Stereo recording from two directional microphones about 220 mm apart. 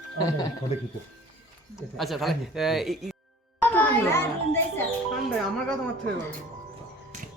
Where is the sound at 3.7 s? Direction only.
10° left (ahead or behind).